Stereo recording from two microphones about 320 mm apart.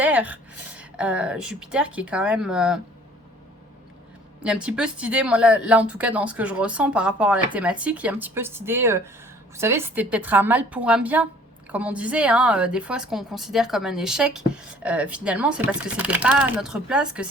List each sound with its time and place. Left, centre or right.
0.0 s a sound: centre
0.8 s a woman's voice: centre
4.4 s a woman's voice: centre